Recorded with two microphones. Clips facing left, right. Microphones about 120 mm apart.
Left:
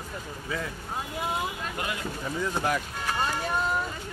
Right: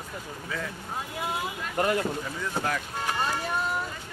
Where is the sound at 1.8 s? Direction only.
45° right (ahead or behind).